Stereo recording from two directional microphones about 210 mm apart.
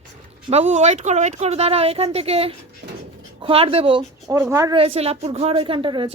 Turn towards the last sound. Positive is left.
turn(degrees=-25)  # may be behind; listen again after turning